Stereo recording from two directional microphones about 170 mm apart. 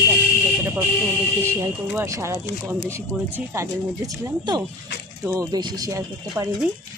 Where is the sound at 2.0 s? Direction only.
15° right (ahead or behind).